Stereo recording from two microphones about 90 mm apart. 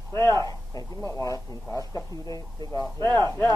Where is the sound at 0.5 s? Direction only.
40° left (ahead or behind).